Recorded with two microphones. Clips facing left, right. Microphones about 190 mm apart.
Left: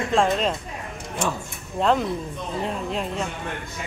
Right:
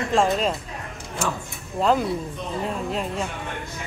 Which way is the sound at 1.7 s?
Centre (ahead or behind).